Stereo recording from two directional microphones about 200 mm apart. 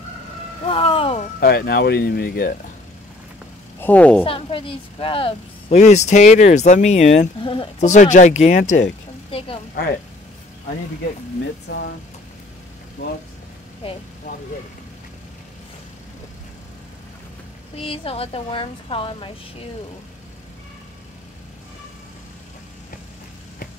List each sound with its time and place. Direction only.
0.7 s a woman's voice: 25° left (ahead or behind)
1.4 s speech: 50° left (ahead or behind)
3.8 s a woman's voice: 5° left (ahead or behind)
4.2 s a woman's voice: 25° left (ahead or behind)
7.9 s a woman's voice: 40° left (ahead or behind)
11.7 s speech: 55° left (ahead or behind)
17.7 s a woman's voice: 30° left (ahead or behind)